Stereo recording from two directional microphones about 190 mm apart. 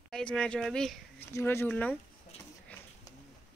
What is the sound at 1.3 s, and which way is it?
Speech, 15° left (ahead or behind).